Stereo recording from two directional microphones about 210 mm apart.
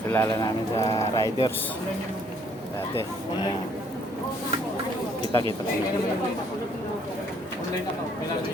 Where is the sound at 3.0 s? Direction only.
20° left (ahead or behind).